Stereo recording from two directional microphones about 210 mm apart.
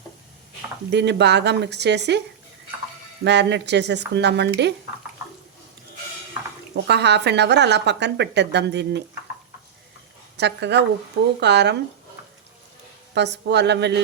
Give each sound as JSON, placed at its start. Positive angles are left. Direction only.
{"t": 0.9, "sound": "a woman's voice", "side_deg": -55}
{"t": 3.2, "sound": "a woman's voice", "side_deg": -55}
{"t": 6.8, "sound": "a woman's voice", "side_deg": -55}
{"t": 10.3, "sound": "a woman's voice", "side_deg": -55}
{"t": 13.1, "sound": "speech", "side_deg": -55}